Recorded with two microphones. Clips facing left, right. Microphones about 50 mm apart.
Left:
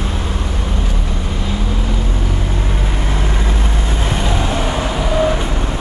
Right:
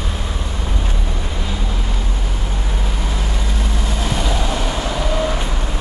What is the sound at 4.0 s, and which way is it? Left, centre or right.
Train, left.